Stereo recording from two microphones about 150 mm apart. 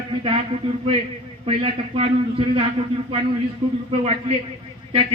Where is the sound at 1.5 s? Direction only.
40° right (ahead or behind).